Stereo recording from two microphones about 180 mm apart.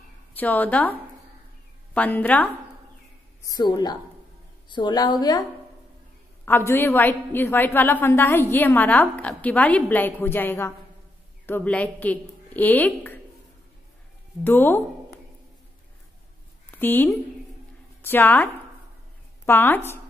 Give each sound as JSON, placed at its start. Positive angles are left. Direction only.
{"t": 0.3, "sound": "a woman's voice", "side_deg": 10}
{"t": 2.0, "sound": "a woman's voice", "side_deg": 10}
{"t": 3.4, "sound": "a woman's voice", "side_deg": 20}
{"t": 6.4, "sound": "a woman's voice", "side_deg": 10}
{"t": 14.4, "sound": "a woman's voice", "side_deg": 10}
{"t": 16.7, "sound": "a woman's voice", "side_deg": 10}